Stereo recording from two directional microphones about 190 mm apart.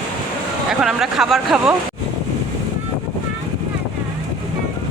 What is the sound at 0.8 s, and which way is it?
Speech, centre (ahead or behind).